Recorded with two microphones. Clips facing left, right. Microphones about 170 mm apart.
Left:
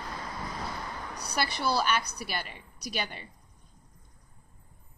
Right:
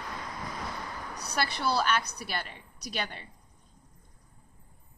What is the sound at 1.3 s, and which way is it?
A woman's voice, centre (ahead or behind).